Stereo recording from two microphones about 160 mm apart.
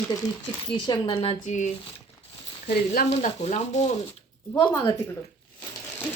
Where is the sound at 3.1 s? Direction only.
45° left (ahead or behind).